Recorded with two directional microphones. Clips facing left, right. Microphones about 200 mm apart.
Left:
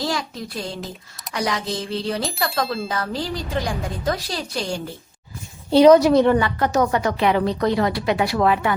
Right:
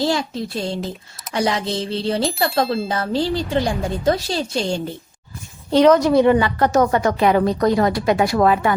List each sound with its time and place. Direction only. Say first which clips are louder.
0.0 s a woman's voice: right 5 dB; 25° right (ahead or behind)
2.6 s speech: right 4 dB; centre (ahead or behind)
2.9 s a woman's voice: right 5 dB; 30° right (ahead or behind)
5.7 s a woman's voice: left 2 dB; 10° left (ahead or behind)
6.1 s a woman's voice: right 2 dB; 10° right (ahead or behind)
6.7 s a woman's voice: right 4 dB; 50° right (ahead or behind)